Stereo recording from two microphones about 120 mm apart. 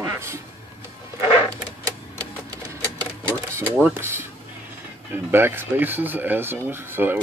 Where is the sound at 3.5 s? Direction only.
15° right (ahead or behind).